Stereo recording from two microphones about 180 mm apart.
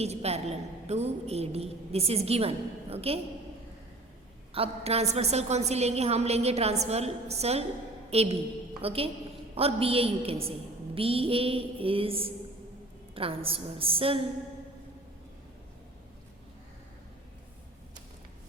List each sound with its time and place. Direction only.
0.0 s a woman's voice: 35° right (ahead or behind)
4.5 s a woman's voice: 35° right (ahead or behind)